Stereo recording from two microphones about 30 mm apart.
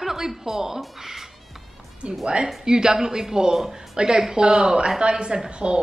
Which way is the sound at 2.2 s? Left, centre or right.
Right.